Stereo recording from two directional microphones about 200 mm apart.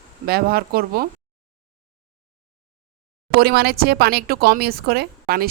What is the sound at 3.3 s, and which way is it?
Speech, 50° right (ahead or behind).